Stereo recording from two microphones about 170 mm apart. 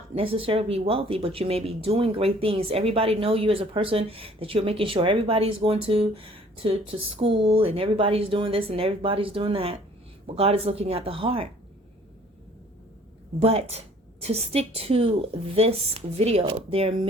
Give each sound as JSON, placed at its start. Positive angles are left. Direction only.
{"t": 0.1, "sound": "speech", "side_deg": -35}
{"t": 13.4, "sound": "speech", "side_deg": -40}